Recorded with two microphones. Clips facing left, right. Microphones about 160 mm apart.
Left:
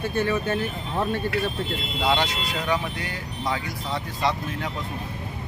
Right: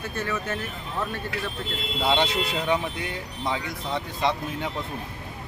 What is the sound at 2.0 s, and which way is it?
Speech, 25° right (ahead or behind).